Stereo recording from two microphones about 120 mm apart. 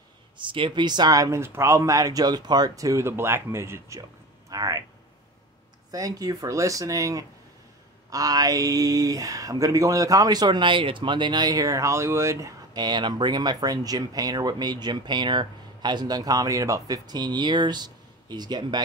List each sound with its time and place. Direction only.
0.4 s speech: 45° right (ahead or behind)
5.9 s speech: 30° right (ahead or behind)